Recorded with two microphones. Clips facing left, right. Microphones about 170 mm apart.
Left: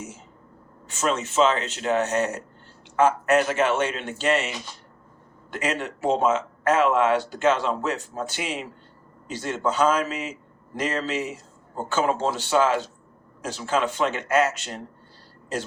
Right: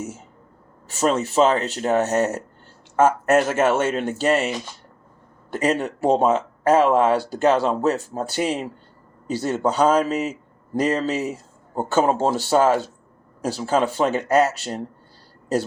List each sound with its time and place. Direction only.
0.9 s speech: 40° right (ahead or behind)
5.5 s speech: 35° right (ahead or behind)